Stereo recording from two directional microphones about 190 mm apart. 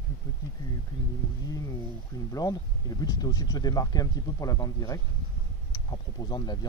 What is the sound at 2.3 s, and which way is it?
Speech, 20° left (ahead or behind).